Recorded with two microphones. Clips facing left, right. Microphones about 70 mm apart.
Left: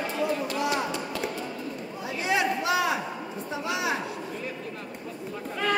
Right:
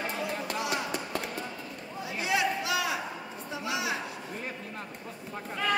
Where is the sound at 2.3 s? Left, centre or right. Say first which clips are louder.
Left 4 dB; left.